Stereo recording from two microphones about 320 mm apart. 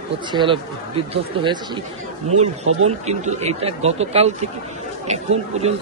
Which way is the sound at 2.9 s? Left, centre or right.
Right.